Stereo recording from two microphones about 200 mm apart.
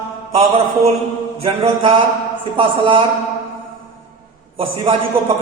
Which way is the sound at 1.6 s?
30° right (ahead or behind).